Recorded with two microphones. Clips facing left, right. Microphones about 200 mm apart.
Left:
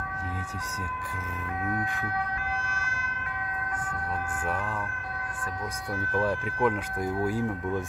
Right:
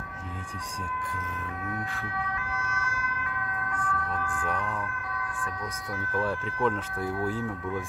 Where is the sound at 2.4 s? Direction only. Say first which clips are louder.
Left 1 dB; 30° left (ahead or behind).